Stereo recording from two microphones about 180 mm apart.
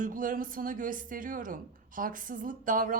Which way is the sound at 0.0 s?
50° right (ahead or behind).